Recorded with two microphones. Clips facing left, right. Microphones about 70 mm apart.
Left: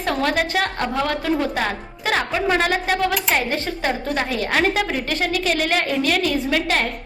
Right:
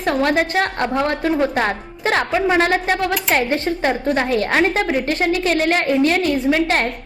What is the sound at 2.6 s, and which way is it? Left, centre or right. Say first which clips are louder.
A woman's voice: right 2 dB; right.